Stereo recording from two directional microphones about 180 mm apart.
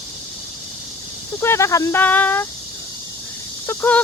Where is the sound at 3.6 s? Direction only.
10° left (ahead or behind).